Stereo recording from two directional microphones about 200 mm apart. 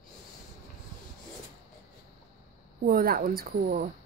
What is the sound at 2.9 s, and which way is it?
Speech, 45° right (ahead or behind).